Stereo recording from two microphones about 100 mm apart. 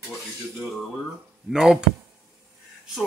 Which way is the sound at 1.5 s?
5° right (ahead or behind).